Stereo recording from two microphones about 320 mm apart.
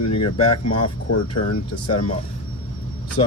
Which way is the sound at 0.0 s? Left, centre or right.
Left.